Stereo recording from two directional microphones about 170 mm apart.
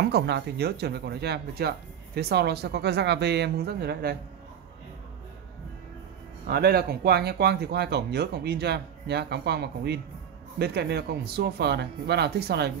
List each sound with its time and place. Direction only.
0.0 s speech: 85° right; by 4.2 s 65° right (ahead or behind)
6.4 s speech: 70° right (ahead or behind)